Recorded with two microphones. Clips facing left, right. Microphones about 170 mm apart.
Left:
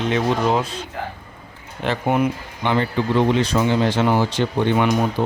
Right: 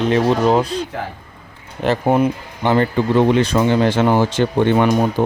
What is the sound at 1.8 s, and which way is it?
Speech, 40° right (ahead or behind).